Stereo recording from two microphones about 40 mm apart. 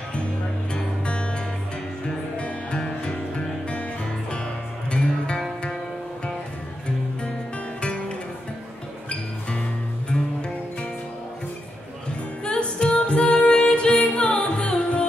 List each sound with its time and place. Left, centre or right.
0.7 s music: left
4.9 s music: left
7.8 s music: left
10.1 s music: left
12.4 s music: left